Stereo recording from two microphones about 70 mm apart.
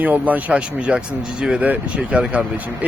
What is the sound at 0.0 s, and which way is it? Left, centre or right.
Speech, right.